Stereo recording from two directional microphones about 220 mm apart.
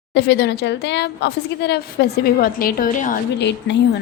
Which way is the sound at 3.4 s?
50° left (ahead or behind).